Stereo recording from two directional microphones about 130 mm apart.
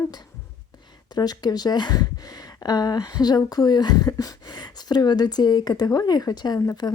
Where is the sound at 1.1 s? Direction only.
30° left (ahead or behind).